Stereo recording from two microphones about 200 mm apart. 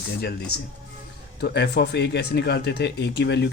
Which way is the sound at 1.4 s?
55° left (ahead or behind).